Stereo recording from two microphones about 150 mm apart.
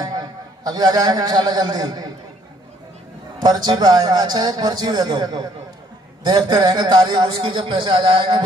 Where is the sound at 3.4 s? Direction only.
25° right (ahead or behind).